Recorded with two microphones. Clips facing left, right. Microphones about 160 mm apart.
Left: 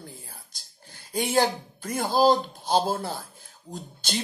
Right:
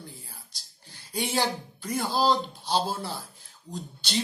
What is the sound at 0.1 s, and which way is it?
Speech, 50° left (ahead or behind).